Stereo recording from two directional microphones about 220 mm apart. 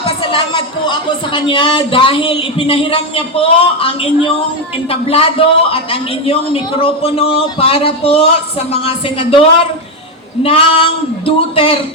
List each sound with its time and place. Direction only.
0.2 s a man's voice: 20° left (ahead or behind)